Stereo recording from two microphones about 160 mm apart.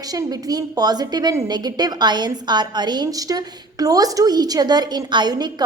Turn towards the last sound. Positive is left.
turn(degrees=-25)  # may be behind; listen again after turning